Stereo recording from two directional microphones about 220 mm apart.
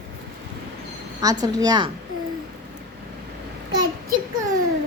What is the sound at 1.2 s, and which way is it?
Speech, 15° right (ahead or behind).